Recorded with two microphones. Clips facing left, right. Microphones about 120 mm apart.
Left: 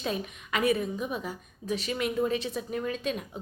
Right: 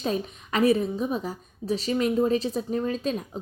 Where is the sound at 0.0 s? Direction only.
35° right (ahead or behind).